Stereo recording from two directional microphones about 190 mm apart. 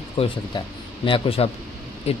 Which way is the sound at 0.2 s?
25° left (ahead or behind).